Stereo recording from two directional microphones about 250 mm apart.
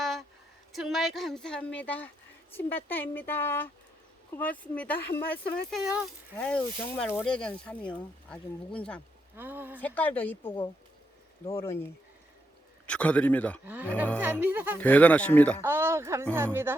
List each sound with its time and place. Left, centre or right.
0.0 s a sound: centre
0.7 s speech: centre
9.3 s speech: centre
9.7 s speech: centre
11.6 s speech: centre
12.9 s speech: centre
13.7 s speech: centre
14.8 s speech: centre
15.6 s speech: centre